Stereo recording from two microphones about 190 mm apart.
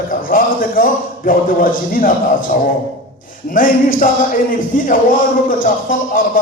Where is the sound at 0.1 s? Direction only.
45° left (ahead or behind).